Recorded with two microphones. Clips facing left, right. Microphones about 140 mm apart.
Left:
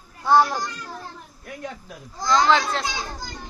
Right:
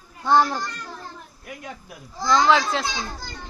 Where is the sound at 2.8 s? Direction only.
15° left (ahead or behind).